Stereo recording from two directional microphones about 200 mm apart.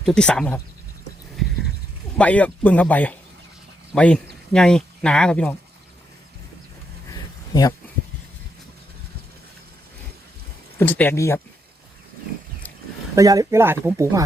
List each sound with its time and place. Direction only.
0.0 s speech: 5° left (ahead or behind)
2.1 s speech: 5° left (ahead or behind)
7.1 s a sound: 15° left (ahead or behind)
10.8 s speech: 10° left (ahead or behind)
13.1 s speech: 15° right (ahead or behind)